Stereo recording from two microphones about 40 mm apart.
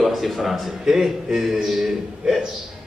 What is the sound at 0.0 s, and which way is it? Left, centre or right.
A man's voice, centre.